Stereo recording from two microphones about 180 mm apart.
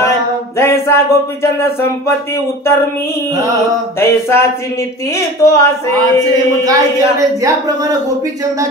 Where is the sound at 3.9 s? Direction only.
15° left (ahead or behind).